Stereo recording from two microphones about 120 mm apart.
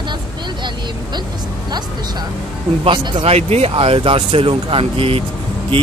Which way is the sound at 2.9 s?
50° right (ahead or behind).